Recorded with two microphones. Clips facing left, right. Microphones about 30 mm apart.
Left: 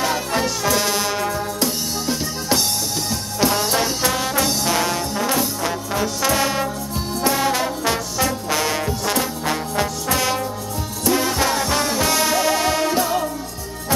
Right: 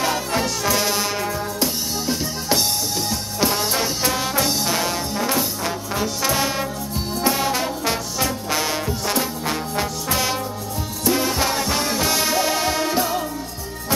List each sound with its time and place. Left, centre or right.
0.0 s music: centre
3.5 s music: centre
5.3 s trombone: centre
7.2 s music: centre
8.7 s music: centre
9.2 s music: centre
11.1 s music: centre
12.3 s music: centre
12.8 s music: centre